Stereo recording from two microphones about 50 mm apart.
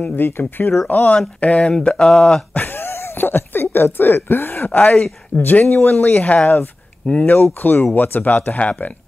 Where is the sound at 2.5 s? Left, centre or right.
Left.